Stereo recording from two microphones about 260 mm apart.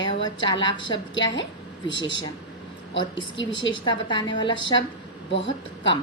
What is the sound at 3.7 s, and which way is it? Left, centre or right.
A woman's voice, centre.